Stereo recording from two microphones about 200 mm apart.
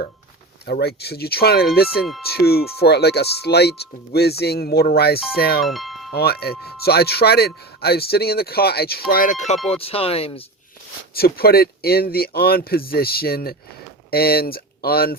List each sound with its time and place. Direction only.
0.6 s speech: 55° left (ahead or behind)
5.6 s music: centre (ahead or behind)
6.1 s speech: 50° left (ahead or behind)
9.6 s speech: 30° left (ahead or behind)
11.1 s speech: 50° left (ahead or behind)